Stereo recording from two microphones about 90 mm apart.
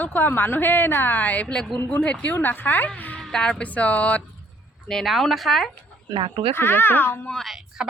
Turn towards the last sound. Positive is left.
turn(degrees=-5)  # may be behind; listen again after turning